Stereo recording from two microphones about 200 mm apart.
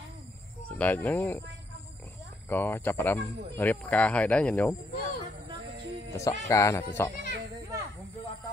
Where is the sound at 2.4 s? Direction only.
10° left (ahead or behind).